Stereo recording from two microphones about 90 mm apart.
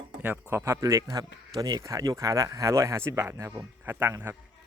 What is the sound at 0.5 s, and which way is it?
Speech, 30° right (ahead or behind).